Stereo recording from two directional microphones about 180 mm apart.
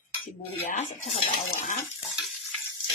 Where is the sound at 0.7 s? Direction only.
40° left (ahead or behind).